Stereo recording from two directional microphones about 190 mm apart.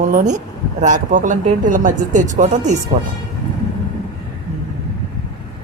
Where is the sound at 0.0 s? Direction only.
45° right (ahead or behind).